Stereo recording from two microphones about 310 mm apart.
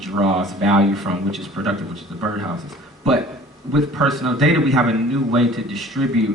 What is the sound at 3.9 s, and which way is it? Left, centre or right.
Speech, centre.